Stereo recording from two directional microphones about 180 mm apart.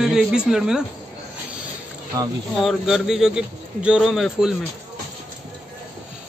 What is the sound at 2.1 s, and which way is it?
Speech, 20° right (ahead or behind).